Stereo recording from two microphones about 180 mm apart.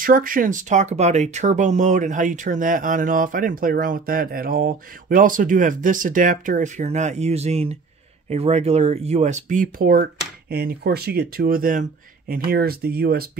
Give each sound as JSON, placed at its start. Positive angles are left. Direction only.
{"t": 0.0, "sound": "speech", "side_deg": -50}